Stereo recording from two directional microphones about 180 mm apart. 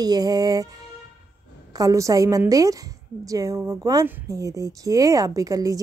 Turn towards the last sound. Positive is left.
turn(degrees=-20)  # may be behind; listen again after turning